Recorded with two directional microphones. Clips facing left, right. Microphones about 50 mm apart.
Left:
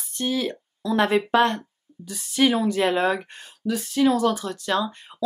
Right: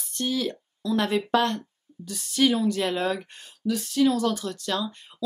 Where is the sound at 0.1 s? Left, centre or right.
Centre.